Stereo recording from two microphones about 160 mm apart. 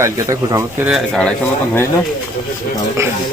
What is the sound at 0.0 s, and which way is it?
Speech, 20° right (ahead or behind).